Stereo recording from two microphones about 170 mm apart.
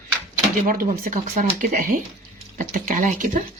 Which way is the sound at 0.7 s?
55° right (ahead or behind).